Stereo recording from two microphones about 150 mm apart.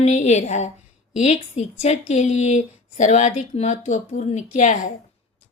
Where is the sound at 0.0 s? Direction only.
50° left (ahead or behind).